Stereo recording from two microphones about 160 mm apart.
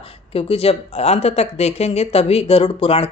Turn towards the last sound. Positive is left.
turn(degrees=40)  # may be behind; listen again after turning